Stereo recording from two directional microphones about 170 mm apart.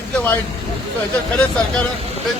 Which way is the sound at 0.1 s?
10° left (ahead or behind).